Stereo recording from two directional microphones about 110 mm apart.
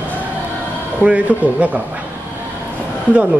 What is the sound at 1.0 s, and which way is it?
Speech, 15° right (ahead or behind).